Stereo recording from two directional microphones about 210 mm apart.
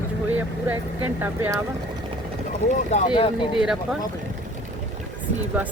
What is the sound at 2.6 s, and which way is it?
Speech, 35° left (ahead or behind).